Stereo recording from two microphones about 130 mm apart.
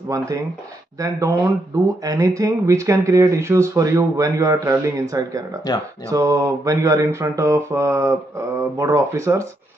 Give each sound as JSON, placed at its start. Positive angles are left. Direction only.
{"t": 0.9, "sound": "speech", "side_deg": -25}